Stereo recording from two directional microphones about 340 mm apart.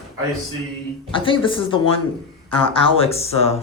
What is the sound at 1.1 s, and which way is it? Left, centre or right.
Speech, centre.